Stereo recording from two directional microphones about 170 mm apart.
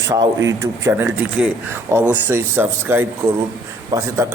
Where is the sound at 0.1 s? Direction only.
20° right (ahead or behind).